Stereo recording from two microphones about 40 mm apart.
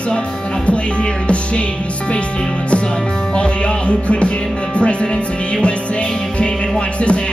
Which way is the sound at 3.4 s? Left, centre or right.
Left.